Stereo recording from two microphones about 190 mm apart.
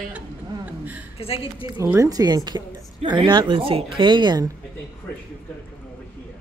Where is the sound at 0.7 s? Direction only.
10° right (ahead or behind).